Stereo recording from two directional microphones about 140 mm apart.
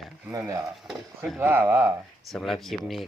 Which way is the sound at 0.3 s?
20° right (ahead or behind).